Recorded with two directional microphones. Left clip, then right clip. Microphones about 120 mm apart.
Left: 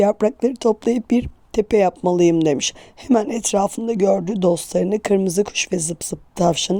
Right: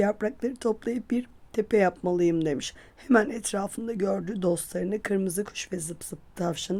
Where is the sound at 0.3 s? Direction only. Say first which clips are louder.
Left 10 dB; 35° left (ahead or behind).